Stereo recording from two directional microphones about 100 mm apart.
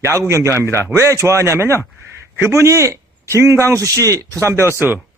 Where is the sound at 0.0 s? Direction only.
30° right (ahead or behind).